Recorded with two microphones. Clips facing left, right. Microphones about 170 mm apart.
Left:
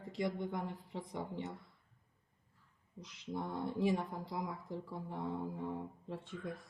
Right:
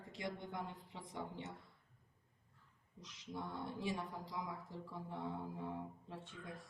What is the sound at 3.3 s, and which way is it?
Speech, 55° left (ahead or behind).